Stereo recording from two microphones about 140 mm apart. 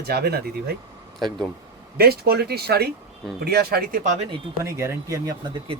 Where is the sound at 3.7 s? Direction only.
90° right.